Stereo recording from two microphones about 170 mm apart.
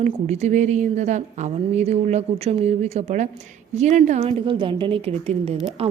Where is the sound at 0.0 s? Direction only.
40° right (ahead or behind).